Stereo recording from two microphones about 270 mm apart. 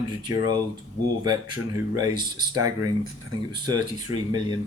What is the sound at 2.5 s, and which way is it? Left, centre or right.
Speech, centre.